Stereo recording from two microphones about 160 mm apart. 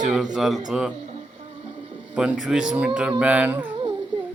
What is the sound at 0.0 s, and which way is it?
Speech, 5° right (ahead or behind).